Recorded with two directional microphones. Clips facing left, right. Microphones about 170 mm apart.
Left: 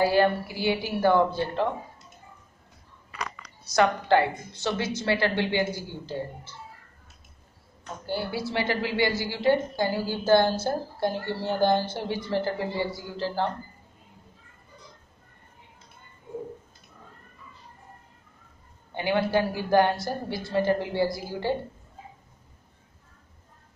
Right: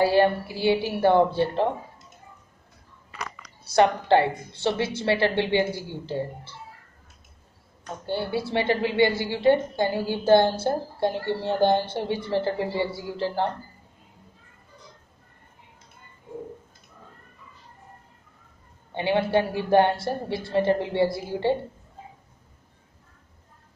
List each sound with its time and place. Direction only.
0.0 s a woman's voice: 25° right (ahead or behind)
3.6 s a woman's voice: 30° right (ahead or behind)
8.1 s a woman's voice: 25° right (ahead or behind)
18.9 s a woman's voice: 25° right (ahead or behind)